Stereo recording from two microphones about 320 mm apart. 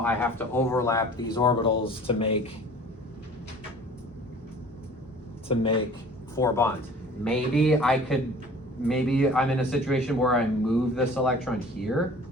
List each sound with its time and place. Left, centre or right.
0.0 s speech: centre
5.5 s speech: centre